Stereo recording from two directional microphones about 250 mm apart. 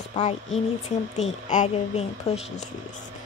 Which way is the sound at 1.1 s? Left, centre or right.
Left.